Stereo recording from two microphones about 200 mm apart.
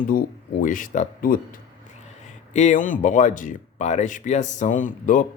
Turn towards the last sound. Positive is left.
turn(degrees=40)  # may be behind; listen again after turning